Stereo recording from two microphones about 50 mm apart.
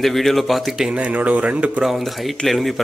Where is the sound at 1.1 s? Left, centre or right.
Right.